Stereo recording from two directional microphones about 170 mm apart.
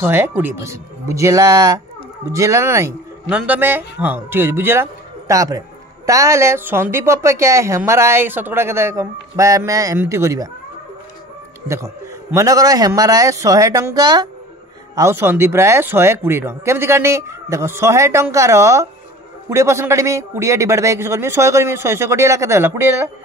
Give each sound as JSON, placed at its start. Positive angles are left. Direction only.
{"t": 0.0, "sound": "a woman's voice", "side_deg": -10}
{"t": 11.6, "sound": "a man's voice", "side_deg": -15}